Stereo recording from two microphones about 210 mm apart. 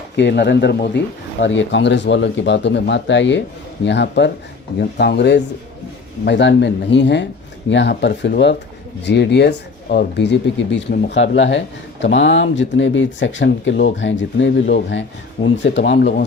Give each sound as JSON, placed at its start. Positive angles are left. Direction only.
{"t": 0.2, "sound": "speech", "side_deg": 55}